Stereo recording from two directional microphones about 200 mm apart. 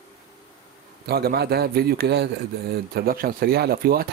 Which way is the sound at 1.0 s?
50° right (ahead or behind).